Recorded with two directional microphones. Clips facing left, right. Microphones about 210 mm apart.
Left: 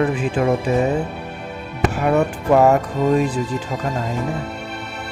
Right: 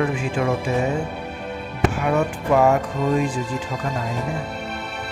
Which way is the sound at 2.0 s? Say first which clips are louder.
Left 3 dB; 40° left (ahead or behind).